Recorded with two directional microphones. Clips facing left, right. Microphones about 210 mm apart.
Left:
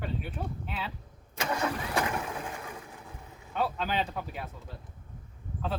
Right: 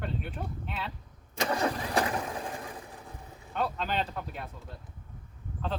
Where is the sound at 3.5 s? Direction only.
5° left (ahead or behind).